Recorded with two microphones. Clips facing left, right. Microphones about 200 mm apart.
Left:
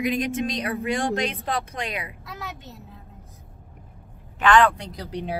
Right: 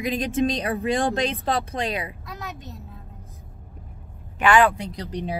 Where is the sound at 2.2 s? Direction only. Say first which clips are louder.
Right 1 dB; centre (ahead or behind).